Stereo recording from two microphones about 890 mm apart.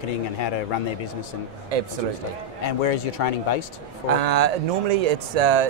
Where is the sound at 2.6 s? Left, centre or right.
Left.